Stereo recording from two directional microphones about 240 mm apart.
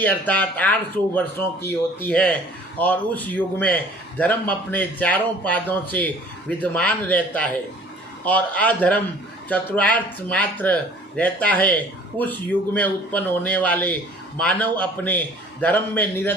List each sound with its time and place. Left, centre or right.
0.0 s speech: centre